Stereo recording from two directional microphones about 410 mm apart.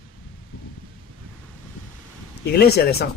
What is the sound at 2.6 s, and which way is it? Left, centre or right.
Speech, left.